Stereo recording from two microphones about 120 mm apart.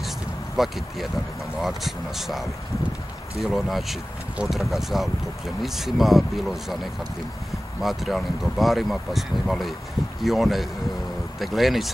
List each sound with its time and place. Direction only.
0.6 s speech: centre (ahead or behind)